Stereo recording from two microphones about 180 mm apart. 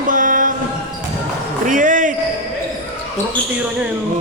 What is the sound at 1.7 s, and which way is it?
Speech, 45° right (ahead or behind).